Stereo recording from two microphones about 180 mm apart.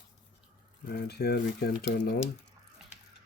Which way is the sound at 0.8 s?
65° left (ahead or behind).